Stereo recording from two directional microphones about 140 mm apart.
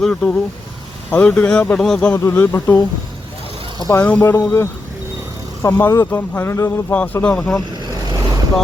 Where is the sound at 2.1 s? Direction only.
20° left (ahead or behind).